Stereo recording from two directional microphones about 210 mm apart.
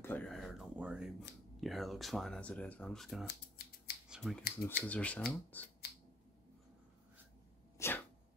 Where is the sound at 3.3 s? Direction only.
50° left (ahead or behind).